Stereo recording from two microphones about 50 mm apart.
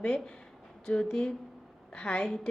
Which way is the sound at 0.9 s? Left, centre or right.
Left.